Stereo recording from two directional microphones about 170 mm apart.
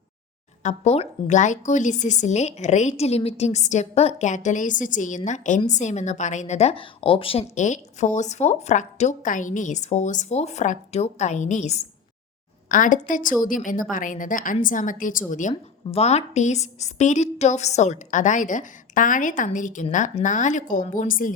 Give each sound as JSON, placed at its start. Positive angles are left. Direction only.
{"t": 0.6, "sound": "speech", "side_deg": 40}